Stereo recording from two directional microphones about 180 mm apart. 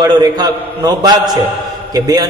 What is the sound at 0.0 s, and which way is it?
A man's voice, 20° right (ahead or behind).